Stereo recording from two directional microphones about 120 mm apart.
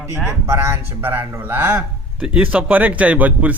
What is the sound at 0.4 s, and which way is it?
A man's voice, 20° right (ahead or behind).